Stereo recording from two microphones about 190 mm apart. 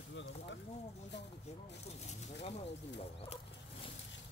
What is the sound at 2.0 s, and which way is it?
Snake, 35° left (ahead or behind).